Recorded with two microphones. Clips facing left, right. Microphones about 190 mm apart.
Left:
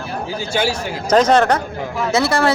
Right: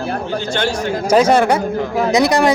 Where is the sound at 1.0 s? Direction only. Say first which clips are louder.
Right 1 dB; 10° right (ahead or behind).